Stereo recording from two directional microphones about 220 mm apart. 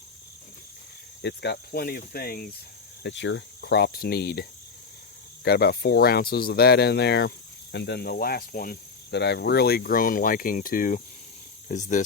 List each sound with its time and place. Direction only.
1.2 s speech: 50° left (ahead or behind)
3.0 s speech: 55° left (ahead or behind)
5.5 s speech: 45° left (ahead or behind)